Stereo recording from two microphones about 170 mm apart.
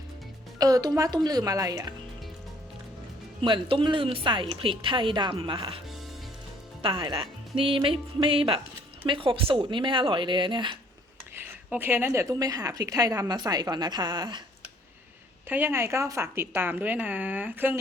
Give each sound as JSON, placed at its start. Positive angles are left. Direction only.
{"t": 0.6, "sound": "a woman's voice", "side_deg": -20}
{"t": 3.4, "sound": "a woman's voice", "side_deg": -30}
{"t": 6.8, "sound": "a woman's voice", "side_deg": -30}
{"t": 11.3, "sound": "a woman's voice", "side_deg": -10}
{"t": 15.4, "sound": "a woman's voice", "side_deg": -10}